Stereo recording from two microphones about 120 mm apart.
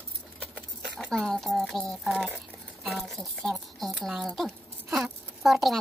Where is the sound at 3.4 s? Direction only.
5° left (ahead or behind).